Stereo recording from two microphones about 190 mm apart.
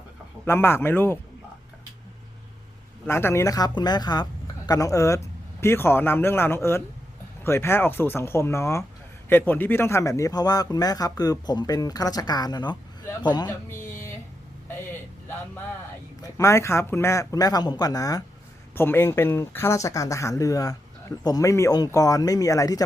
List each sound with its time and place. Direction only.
0.4 s speech: 10° left (ahead or behind)
3.1 s speech: 15° left (ahead or behind)
16.2 s speech: 15° left (ahead or behind)